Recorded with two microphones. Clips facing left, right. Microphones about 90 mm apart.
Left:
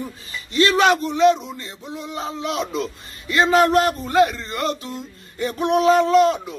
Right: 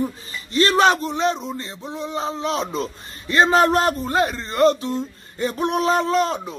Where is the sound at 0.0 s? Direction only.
35° right (ahead or behind).